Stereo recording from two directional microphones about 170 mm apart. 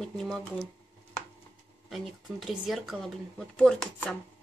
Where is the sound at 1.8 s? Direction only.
Centre (ahead or behind).